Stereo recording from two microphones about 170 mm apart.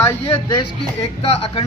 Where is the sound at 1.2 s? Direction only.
35° left (ahead or behind).